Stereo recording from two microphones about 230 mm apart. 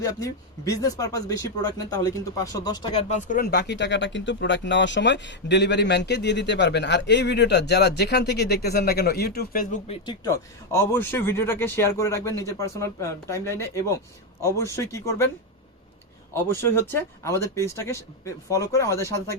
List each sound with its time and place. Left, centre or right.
0.0 s speech: centre; by 9.9 s left
9.9 s speech: centre
16.3 s speech: centre